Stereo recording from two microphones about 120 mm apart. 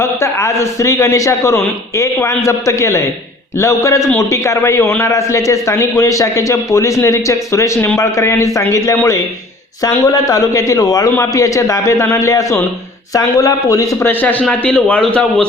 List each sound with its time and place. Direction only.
0.0 s a man's voice: 25° left (ahead or behind)
14.1 s a man's voice: 15° left (ahead or behind)